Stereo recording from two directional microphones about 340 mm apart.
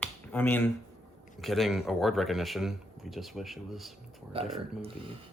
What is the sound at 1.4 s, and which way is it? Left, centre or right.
A man's voice, centre.